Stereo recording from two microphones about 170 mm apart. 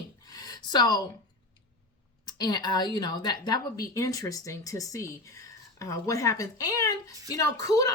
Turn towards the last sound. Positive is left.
turn(degrees=20)  # may be behind; listen again after turning